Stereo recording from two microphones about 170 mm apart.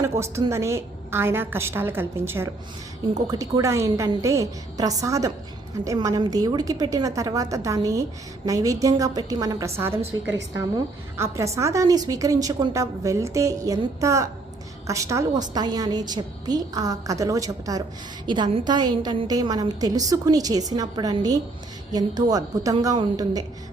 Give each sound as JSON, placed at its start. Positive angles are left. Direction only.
{"t": 0.0, "sound": "a woman's voice", "side_deg": -15}